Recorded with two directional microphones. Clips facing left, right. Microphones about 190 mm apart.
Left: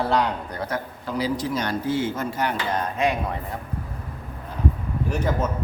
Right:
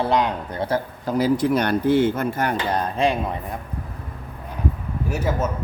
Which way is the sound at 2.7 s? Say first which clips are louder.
Right 2 dB; 30° right (ahead or behind).